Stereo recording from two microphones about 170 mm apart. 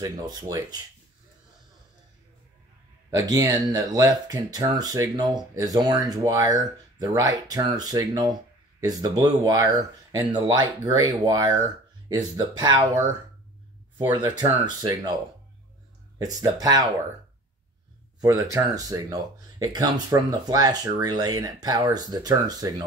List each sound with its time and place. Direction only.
0.0 s speech: 20° right (ahead or behind)
3.1 s speech: 20° right (ahead or behind)
14.4 s speech: 25° right (ahead or behind)
16.2 s speech: 20° right (ahead or behind)
18.2 s speech: 20° right (ahead or behind)